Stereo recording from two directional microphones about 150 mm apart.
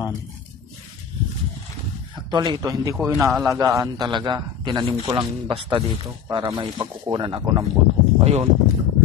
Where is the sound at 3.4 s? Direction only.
20° right (ahead or behind).